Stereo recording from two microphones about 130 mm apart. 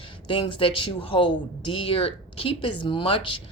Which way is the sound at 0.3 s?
45° left (ahead or behind).